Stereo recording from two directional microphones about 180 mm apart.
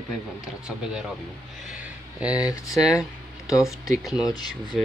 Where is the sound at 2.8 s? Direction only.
Centre (ahead or behind).